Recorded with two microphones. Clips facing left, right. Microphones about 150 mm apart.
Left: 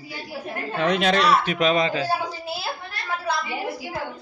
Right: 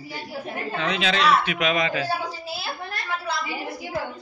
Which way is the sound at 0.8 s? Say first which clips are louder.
Left 4 dB; 50° left (ahead or behind).